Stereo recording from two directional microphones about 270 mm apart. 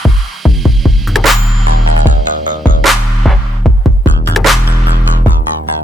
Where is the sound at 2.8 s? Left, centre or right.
Centre.